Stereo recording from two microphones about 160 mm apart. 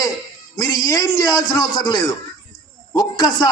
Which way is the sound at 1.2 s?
25° left (ahead or behind).